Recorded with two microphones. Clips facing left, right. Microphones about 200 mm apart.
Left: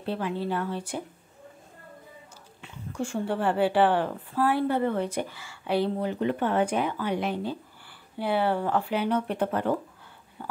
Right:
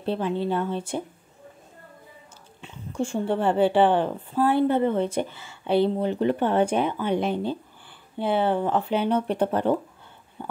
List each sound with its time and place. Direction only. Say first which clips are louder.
0.0 s speech: right 4 dB; 25° right (ahead or behind)
2.6 s speech: right 4 dB; 25° right (ahead or behind)